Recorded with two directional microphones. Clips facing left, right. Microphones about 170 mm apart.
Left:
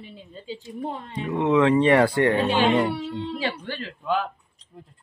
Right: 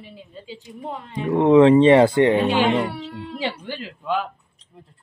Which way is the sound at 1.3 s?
35° right (ahead or behind).